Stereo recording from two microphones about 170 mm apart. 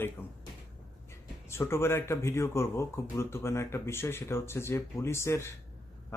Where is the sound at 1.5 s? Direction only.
15° left (ahead or behind).